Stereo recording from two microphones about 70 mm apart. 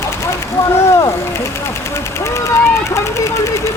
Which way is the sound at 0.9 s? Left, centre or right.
Left.